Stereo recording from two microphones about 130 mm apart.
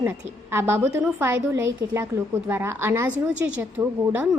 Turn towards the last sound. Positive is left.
turn(degrees=-10)  # may be behind; listen again after turning